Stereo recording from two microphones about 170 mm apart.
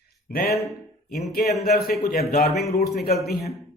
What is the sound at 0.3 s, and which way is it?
Speech, 65° left (ahead or behind).